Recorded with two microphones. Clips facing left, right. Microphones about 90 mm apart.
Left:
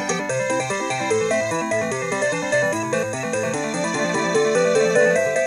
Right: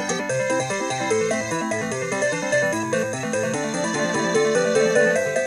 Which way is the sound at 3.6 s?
20° right (ahead or behind).